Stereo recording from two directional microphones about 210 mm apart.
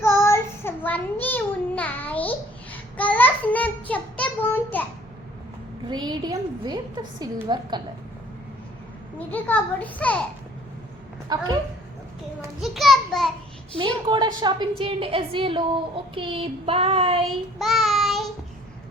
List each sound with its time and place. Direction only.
0.0 s child singing: 10° left (ahead or behind)
5.9 s a sound: 20° right (ahead or behind)
9.1 s a child's voice: 10° left (ahead or behind)
11.3 s a woman's voice: 20° right (ahead or behind)
12.6 s a child's voice: centre (ahead or behind)
13.7 s a woman's voice: 20° right (ahead or behind)
17.6 s child singing: centre (ahead or behind)